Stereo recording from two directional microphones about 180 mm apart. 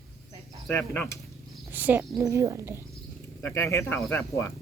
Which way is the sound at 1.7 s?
10° right (ahead or behind).